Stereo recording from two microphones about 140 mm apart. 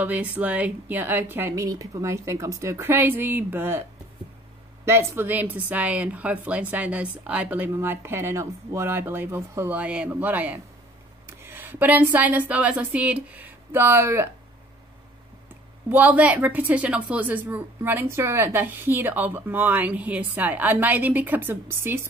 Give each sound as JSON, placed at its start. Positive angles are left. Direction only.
{"t": 0.0, "sound": "a woman's voice", "side_deg": -10}
{"t": 4.8, "sound": "a woman's voice", "side_deg": -20}
{"t": 15.9, "sound": "a woman's voice", "side_deg": -10}